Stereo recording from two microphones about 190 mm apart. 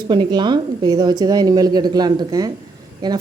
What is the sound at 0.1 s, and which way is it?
Speech, 25° right (ahead or behind).